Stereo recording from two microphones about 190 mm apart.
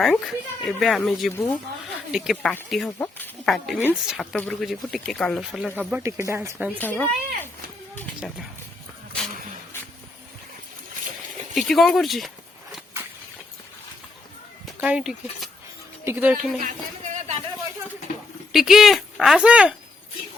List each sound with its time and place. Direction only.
0.0 s speech: centre (ahead or behind)
1.3 s speech: 10° left (ahead or behind)
2.1 s speech: centre (ahead or behind)
6.7 s speech: 10° left (ahead or behind)
11.5 s speech: centre (ahead or behind)
14.8 s speech: 5° right (ahead or behind)
16.6 s a sound: 40° right (ahead or behind)
18.5 s speech: centre (ahead or behind)